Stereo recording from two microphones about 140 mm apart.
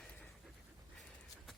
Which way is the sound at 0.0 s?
Centre (ahead or behind).